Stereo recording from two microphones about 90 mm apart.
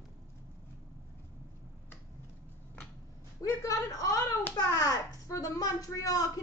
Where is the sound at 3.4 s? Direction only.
40° left (ahead or behind).